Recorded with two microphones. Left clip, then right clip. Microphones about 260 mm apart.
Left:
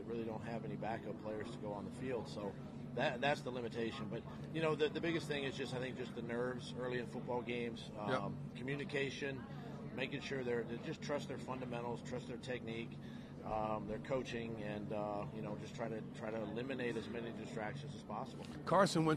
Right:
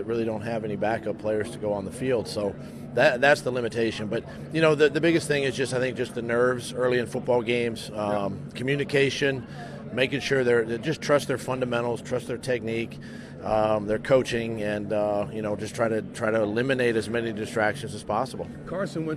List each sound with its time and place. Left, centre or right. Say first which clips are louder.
0.1 s a man's voice: right 16 dB; right
18.7 s speech: right 2 dB; left